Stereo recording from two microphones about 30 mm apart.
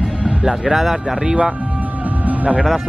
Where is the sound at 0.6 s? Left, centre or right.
Centre.